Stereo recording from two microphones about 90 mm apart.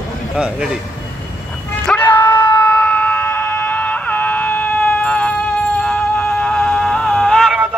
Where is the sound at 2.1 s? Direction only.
25° left (ahead or behind).